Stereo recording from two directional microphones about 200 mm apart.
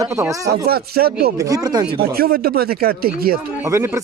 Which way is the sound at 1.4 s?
15° right (ahead or behind).